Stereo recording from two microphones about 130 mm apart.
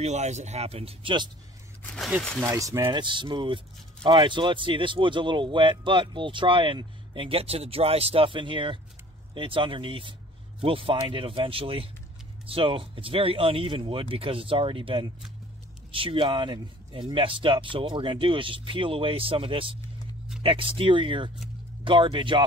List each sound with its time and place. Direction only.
0.0 s speech: 60° right (ahead or behind); by 1.3 s 40° right (ahead or behind)
2.0 s speech: 5° right (ahead or behind)
2.4 s speech: 20° right (ahead or behind)
3.0 s speech: 40° right (ahead or behind)